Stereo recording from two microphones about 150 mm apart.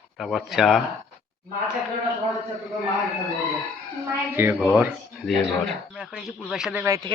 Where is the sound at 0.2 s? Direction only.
Centre (ahead or behind).